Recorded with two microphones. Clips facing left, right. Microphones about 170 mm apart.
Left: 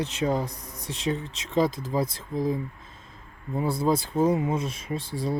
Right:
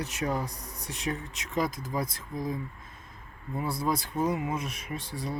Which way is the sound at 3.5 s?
25° left (ahead or behind).